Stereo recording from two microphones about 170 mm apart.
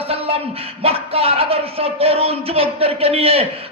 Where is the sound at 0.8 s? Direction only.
35° right (ahead or behind).